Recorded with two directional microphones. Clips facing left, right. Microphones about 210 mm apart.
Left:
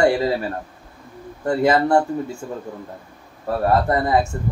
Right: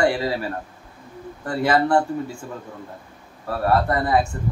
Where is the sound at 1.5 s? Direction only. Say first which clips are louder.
Left 3 dB; 25° left (ahead or behind).